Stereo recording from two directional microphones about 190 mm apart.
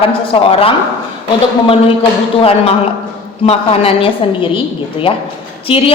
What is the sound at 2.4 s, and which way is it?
A woman's voice, 30° left (ahead or behind).